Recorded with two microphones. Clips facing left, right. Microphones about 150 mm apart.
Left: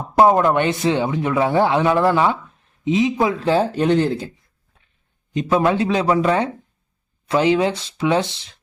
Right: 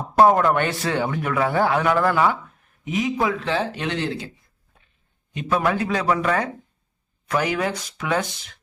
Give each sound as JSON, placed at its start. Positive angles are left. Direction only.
{"t": 0.2, "sound": "speech", "side_deg": 20}
{"t": 3.5, "sound": "speech", "side_deg": 40}
{"t": 5.5, "sound": "speech", "side_deg": 25}